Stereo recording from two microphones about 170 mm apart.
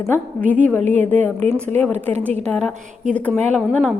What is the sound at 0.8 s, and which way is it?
Speech, 45° right (ahead or behind).